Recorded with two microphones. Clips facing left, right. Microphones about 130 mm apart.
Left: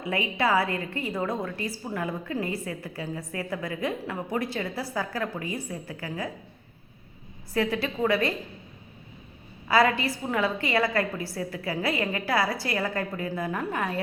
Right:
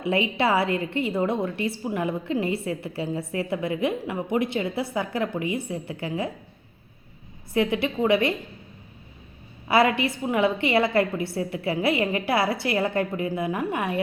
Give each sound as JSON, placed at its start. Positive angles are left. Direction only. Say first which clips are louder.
{"t": 0.0, "sound": "a woman's voice", "louder": "right 4 dB", "side_deg": -25}
{"t": 7.5, "sound": "a woman's voice", "louder": "right 3 dB", "side_deg": -20}
{"t": 9.6, "sound": "a woman's voice", "louder": "right 2 dB", "side_deg": -25}